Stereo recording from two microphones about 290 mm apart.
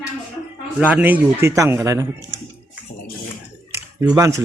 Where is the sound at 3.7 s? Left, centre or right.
Centre.